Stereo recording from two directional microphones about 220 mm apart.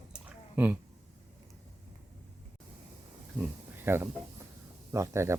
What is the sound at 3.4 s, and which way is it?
Speech, 10° right (ahead or behind).